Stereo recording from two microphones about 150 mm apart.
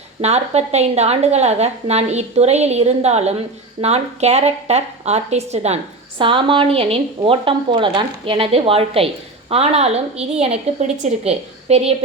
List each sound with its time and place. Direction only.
0.2 s a woman's voice: 45° right (ahead or behind)